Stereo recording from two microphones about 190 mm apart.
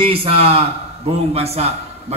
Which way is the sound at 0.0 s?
30° right (ahead or behind).